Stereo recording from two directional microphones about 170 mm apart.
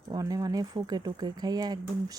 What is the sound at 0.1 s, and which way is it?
Speech, 20° right (ahead or behind).